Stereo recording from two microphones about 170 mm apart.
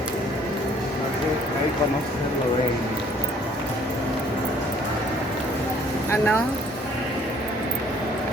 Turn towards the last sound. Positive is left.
turn(degrees=15)  # may be behind; listen again after turning